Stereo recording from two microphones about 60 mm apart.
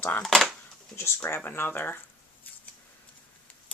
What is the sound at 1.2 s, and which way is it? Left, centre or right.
Speech, left.